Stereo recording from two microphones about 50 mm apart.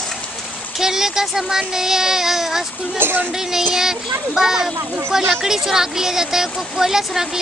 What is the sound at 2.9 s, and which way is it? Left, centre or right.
Speech, right.